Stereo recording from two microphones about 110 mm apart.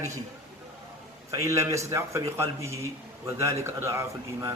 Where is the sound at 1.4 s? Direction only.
25° right (ahead or behind).